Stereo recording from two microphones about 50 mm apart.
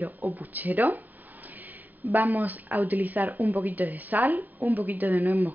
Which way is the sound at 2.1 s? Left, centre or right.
Right.